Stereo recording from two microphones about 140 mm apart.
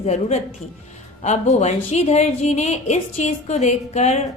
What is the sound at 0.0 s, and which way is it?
A woman's voice, 50° left (ahead or behind).